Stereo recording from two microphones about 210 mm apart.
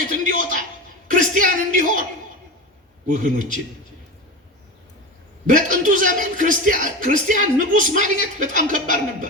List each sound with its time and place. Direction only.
0.0 s a man's voice: 40° right (ahead or behind)
1.1 s a sound: 40° right (ahead or behind)
3.1 s speech: 35° right (ahead or behind)
5.5 s speech: 35° right (ahead or behind)